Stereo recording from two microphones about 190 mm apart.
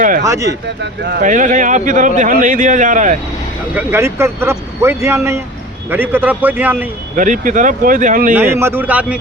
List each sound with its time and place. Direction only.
0.3 s speech: 15° right (ahead or behind)
0.8 s speech: 65° right (ahead or behind)
1.2 s speech: 40° right (ahead or behind)
3.8 s speech: 10° right (ahead or behind)
7.2 s speech: 45° right (ahead or behind)
8.3 s speech: 10° right (ahead or behind)